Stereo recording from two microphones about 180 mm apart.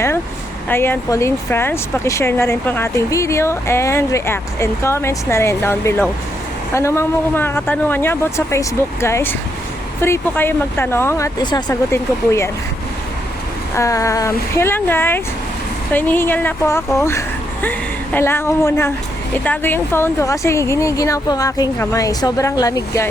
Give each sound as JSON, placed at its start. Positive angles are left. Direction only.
{"t": 0.7, "sound": "speech", "side_deg": 10}
{"t": 13.7, "sound": "speech", "side_deg": 15}